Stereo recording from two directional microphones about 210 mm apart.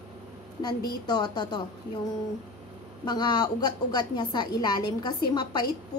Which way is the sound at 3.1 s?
20° left (ahead or behind).